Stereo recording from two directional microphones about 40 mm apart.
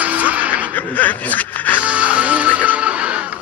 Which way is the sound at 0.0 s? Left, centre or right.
Right.